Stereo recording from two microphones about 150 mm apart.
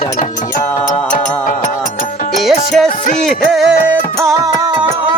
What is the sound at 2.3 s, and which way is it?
Music, centre (ahead or behind).